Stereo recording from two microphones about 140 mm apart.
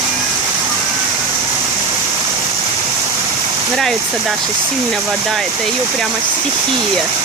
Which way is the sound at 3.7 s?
Centre (ahead or behind).